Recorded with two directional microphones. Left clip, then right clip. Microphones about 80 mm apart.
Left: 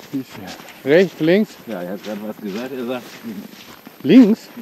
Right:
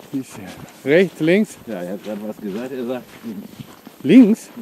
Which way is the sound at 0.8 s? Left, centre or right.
Right.